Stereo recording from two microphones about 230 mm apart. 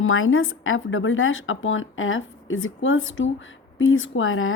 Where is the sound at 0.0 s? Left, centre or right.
Left.